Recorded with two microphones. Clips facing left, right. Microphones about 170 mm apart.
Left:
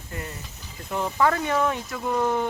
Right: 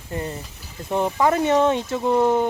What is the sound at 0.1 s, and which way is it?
Speech, 30° right (ahead or behind).